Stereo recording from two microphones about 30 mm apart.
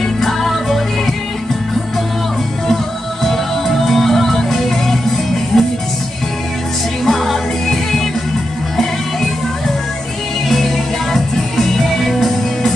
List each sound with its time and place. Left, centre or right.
0.0 s music: centre
2.7 s music: centre
7.1 s music: centre
11.1 s music: centre